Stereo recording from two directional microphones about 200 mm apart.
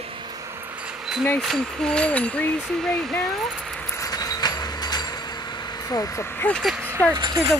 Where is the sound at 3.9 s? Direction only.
20° left (ahead or behind).